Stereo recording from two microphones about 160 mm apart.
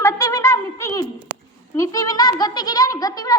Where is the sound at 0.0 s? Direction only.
20° left (ahead or behind).